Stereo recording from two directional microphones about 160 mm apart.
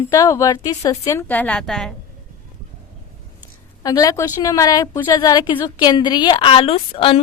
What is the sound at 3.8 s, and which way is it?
A woman's voice, 20° left (ahead or behind).